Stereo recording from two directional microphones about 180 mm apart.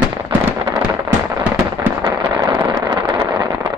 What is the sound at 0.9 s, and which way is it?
Firecracker, 20° right (ahead or behind).